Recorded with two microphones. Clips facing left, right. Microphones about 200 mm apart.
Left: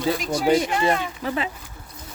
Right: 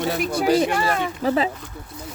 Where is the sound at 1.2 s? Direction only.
35° right (ahead or behind).